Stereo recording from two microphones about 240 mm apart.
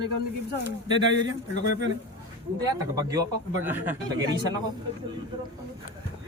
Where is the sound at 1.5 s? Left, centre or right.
Left.